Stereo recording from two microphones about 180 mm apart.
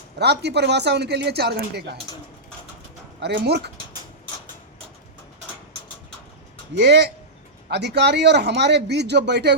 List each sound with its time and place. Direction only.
0.2 s speech: 70° right (ahead or behind)
3.2 s speech: 65° right (ahead or behind)
6.7 s speech: 70° right (ahead or behind)